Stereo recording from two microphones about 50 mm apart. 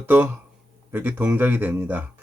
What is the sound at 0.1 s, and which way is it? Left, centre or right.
A man's voice, right.